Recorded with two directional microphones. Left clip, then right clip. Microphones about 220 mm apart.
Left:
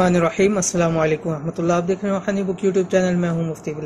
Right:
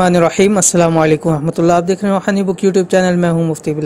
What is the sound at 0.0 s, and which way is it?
A man's voice, 45° right (ahead or behind).